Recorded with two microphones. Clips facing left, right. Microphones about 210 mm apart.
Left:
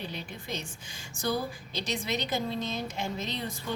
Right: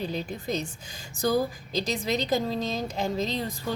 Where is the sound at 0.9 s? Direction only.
40° right (ahead or behind).